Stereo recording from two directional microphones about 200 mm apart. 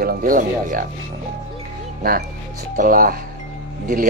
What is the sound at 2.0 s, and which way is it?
Speech, 50° right (ahead or behind).